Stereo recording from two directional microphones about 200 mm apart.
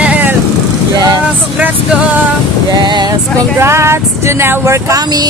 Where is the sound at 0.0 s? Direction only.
10° right (ahead or behind).